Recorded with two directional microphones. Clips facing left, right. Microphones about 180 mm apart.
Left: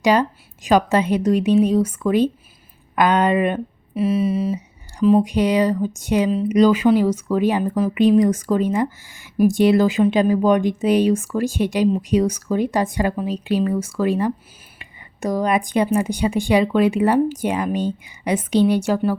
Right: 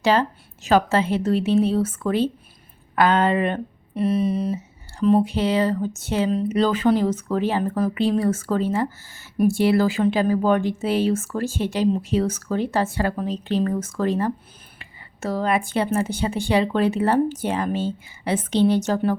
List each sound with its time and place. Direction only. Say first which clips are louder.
0.0 s a woman's voice: left 3 dB; 15° left (ahead or behind)
3.9 s a woman's voice: left 2 dB; 5° left (ahead or behind)